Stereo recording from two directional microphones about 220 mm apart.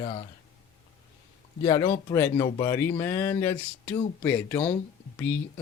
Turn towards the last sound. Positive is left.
turn(degrees=10)  # may be behind; listen again after turning